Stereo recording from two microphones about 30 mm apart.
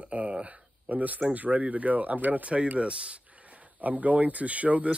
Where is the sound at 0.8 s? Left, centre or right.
Right.